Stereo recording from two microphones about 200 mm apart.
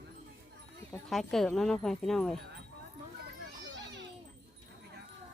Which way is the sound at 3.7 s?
65° right (ahead or behind).